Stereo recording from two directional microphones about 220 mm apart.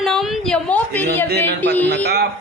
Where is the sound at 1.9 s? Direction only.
50° right (ahead or behind).